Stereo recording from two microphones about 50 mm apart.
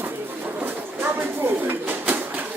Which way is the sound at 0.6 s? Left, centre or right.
Right.